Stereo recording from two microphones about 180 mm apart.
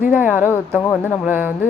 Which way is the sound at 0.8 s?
10° left (ahead or behind).